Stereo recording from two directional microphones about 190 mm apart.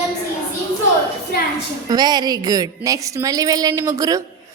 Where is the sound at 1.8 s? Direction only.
20° right (ahead or behind).